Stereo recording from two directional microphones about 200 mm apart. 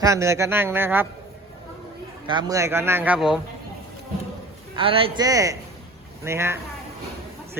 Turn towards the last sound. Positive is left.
turn(degrees=-15)  # may be behind; listen again after turning